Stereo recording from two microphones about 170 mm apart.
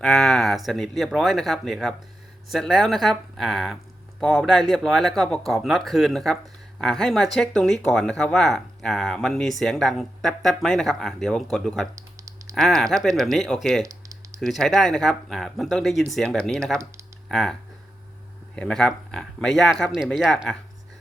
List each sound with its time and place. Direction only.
0.0 s speech: centre (ahead or behind)
11.9 s typing: 20° right (ahead or behind)
12.5 s speech: centre (ahead or behind)
13.8 s typing: 20° right (ahead or behind)
14.4 s speech: centre (ahead or behind)